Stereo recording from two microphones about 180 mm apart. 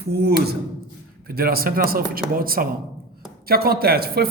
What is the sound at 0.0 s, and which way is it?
A man's voice, 65° right (ahead or behind).